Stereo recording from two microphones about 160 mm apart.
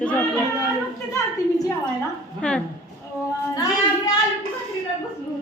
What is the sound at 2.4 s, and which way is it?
Speech, 5° left (ahead or behind).